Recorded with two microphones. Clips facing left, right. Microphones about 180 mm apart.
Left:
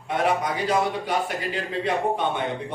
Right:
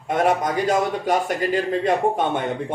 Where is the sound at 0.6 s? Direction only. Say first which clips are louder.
Right 3 dB; 45° right (ahead or behind).